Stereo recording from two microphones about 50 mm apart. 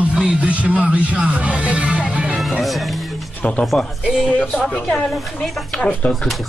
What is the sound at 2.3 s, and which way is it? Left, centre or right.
Music, centre.